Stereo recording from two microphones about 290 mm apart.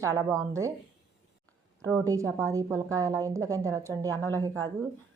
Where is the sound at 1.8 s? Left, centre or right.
Centre.